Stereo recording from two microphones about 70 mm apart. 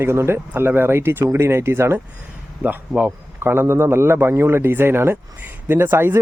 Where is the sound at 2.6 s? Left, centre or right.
Right.